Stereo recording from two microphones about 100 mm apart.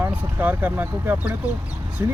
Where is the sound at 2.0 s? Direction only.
25° right (ahead or behind).